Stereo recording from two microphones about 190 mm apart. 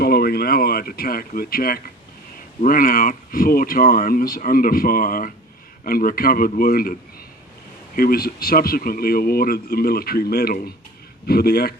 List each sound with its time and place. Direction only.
0.0 s speech: 55° left (ahead or behind)
7.9 s a man's voice: 50° left (ahead or behind)